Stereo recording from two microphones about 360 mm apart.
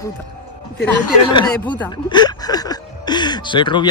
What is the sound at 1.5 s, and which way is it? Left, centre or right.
Speech, centre.